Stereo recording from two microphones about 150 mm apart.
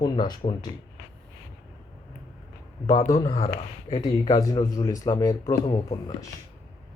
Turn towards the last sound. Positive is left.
turn(degrees=30)  # may be behind; listen again after turning